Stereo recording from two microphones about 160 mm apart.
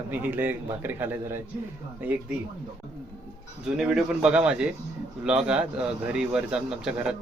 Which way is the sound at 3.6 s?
5° right (ahead or behind).